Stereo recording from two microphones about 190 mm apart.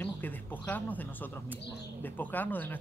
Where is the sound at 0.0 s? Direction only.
10° left (ahead or behind).